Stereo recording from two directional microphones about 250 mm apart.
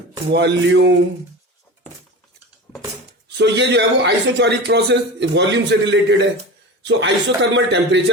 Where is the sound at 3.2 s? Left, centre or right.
Right.